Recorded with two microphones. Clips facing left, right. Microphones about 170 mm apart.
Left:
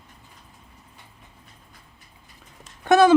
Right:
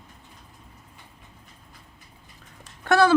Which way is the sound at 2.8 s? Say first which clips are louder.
Left 3 dB; 20° left (ahead or behind).